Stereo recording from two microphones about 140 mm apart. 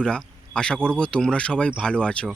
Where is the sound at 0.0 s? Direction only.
5° left (ahead or behind).